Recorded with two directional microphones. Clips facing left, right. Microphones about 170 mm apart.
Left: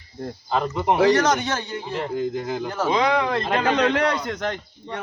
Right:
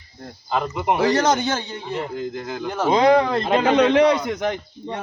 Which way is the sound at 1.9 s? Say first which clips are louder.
Left 1 dB; centre (ahead or behind).